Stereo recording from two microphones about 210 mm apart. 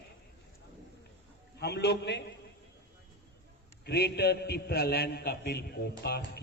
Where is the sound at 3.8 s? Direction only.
50° left (ahead or behind).